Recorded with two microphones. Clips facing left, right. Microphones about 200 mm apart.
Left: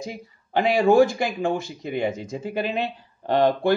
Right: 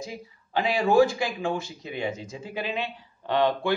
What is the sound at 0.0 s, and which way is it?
Speech, 55° left (ahead or behind).